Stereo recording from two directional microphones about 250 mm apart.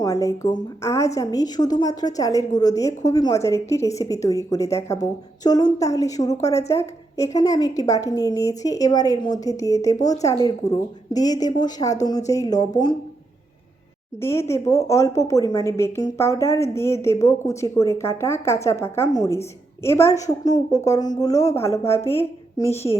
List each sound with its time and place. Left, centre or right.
0.0 s a woman's voice: centre
14.2 s a woman's voice: centre